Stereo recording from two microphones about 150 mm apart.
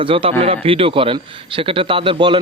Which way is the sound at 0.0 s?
35° right (ahead or behind).